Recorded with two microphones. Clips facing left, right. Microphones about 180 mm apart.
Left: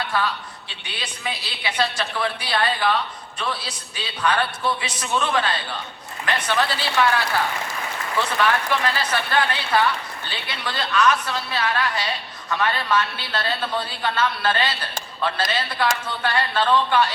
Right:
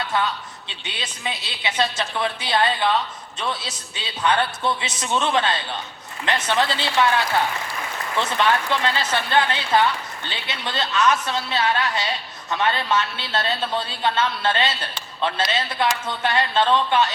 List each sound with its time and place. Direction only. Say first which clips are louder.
0.1 s a woman's voice: right 2 dB; 20° right (ahead or behind)
8.4 s a woman's voice: right 1 dB; 25° right (ahead or behind)
15.8 s a woman's voice: right 1 dB; 20° right (ahead or behind)